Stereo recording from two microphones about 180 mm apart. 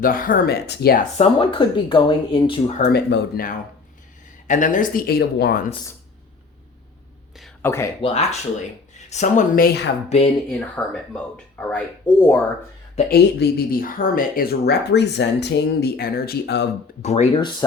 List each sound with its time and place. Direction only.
0.0 s speech: 50° left (ahead or behind)
1.1 s speech: 35° left (ahead or behind)
2.8 s speech: 60° left (ahead or behind)
4.4 s speech: 45° left (ahead or behind); by 5.6 s 65° left (ahead or behind)
7.6 s speech: 15° left (ahead or behind)
8.0 s speech: 35° left (ahead or behind); by 9.9 s 60° left (ahead or behind)
10.1 s speech: 35° left (ahead or behind)
10.8 s speech: 5° left (ahead or behind)
13.1 s speech: 65° left (ahead or behind)
17.0 s speech: 40° left (ahead or behind)